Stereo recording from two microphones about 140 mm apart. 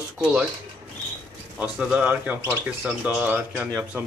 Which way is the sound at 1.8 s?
10° right (ahead or behind).